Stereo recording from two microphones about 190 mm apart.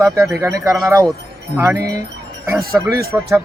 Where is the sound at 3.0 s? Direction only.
15° right (ahead or behind).